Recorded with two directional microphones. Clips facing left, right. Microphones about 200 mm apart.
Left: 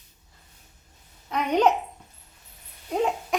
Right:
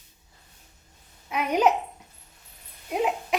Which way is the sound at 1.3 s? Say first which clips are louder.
Left 1 dB; 10° right (ahead or behind).